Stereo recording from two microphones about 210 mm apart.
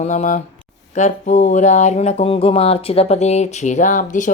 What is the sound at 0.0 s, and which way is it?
Speech, 35° left (ahead or behind).